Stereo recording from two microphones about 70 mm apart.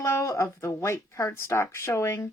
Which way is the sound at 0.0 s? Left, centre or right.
Left.